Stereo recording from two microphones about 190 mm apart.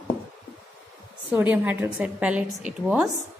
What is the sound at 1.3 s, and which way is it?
A woman's voice, 10° right (ahead or behind).